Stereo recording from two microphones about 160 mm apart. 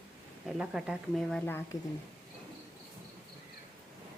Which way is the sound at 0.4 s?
5° right (ahead or behind).